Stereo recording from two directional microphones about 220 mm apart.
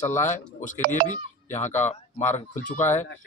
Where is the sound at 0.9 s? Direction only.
35° left (ahead or behind).